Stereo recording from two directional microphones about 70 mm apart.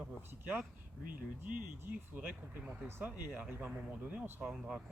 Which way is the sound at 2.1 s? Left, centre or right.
Right.